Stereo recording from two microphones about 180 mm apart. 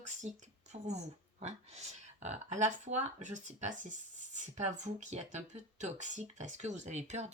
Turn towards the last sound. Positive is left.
turn(degrees=-40)  # may be behind; listen again after turning